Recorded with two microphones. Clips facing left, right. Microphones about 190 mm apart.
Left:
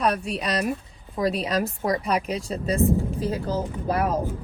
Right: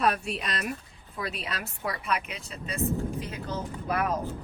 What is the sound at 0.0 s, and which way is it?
Speech, 40° left (ahead or behind).